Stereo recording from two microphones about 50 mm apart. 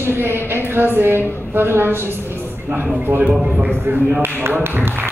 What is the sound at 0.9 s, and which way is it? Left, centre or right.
A woman's voice, right.